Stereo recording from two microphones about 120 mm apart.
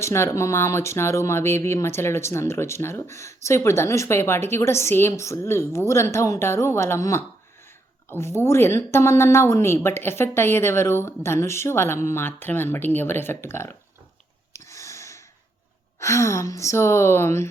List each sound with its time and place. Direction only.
0.0 s speech: 25° left (ahead or behind)
14.5 s a sound: 25° left (ahead or behind)
16.0 s speech: 25° left (ahead or behind)